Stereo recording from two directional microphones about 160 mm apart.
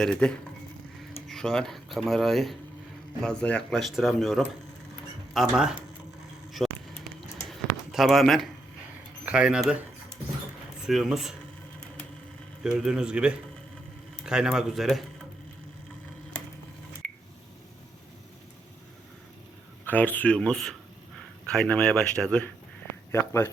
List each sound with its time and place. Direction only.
0.0 s speech: 5° left (ahead or behind)
6.6 s a sound: centre (ahead or behind)
7.5 s basketball bounce: centre (ahead or behind)
9.2 s speech: 5° right (ahead or behind)
10.8 s speech: centre (ahead or behind)
12.6 s speech: 5° right (ahead or behind)
19.8 s speech: 10° left (ahead or behind)